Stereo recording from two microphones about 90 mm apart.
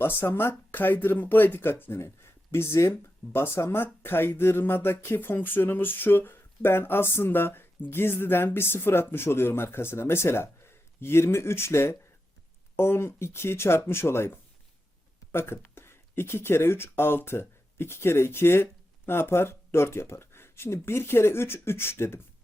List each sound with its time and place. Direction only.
0.0 s speech: 25° left (ahead or behind)